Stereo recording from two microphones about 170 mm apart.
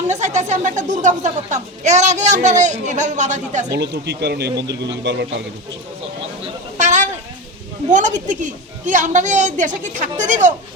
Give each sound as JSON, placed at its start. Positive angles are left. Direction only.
{"t": 0.1, "sound": "a woman's voice", "side_deg": -45}
{"t": 3.8, "sound": "speech", "side_deg": -75}
{"t": 6.7, "sound": "a sound", "side_deg": -45}
{"t": 7.9, "sound": "a woman's voice", "side_deg": -45}